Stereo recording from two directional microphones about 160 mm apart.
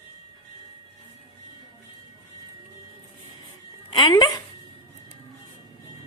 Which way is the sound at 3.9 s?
30° left (ahead or behind).